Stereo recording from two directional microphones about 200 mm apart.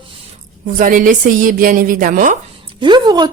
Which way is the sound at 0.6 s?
40° right (ahead or behind).